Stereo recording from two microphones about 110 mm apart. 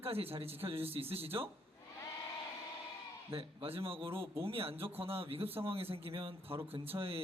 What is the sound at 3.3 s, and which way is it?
Speech, 60° right (ahead or behind).